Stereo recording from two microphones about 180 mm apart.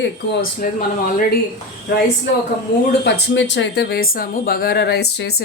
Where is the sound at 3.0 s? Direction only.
80° left.